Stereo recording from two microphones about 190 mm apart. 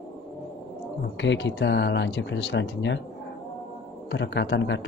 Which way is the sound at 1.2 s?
70° left (ahead or behind).